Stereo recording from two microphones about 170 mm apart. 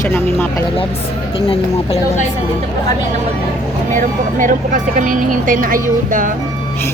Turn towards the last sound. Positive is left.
turn(degrees=-50)  # may be behind; listen again after turning